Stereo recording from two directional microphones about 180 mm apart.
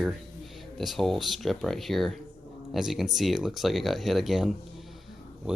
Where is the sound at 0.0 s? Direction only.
Centre (ahead or behind).